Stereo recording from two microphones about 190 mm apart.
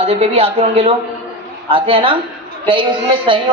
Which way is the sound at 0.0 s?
30° right (ahead or behind).